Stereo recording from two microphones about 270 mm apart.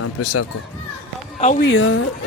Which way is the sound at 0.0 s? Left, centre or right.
Left.